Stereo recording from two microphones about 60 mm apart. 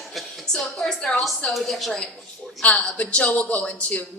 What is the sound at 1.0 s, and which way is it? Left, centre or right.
Speech, centre.